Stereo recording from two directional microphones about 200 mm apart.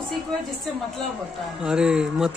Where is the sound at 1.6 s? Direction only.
5° right (ahead or behind).